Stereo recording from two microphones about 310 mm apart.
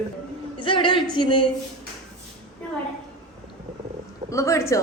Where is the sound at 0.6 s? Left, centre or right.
Centre.